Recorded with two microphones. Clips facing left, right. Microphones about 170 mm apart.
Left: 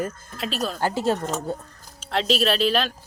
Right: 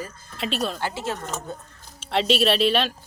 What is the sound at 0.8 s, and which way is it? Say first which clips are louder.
Speech: left 6 dB; 40° left (ahead or behind).